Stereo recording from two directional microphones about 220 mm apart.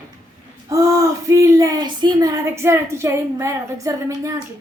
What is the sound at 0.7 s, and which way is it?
Speech, 15° right (ahead or behind).